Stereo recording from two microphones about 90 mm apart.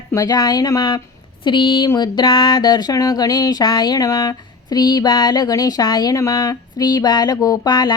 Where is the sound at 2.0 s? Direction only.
60° left (ahead or behind).